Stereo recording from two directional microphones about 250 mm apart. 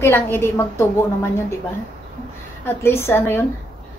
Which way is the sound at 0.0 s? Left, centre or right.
Centre.